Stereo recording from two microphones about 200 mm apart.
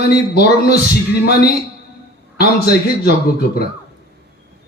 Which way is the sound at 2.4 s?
55° left (ahead or behind).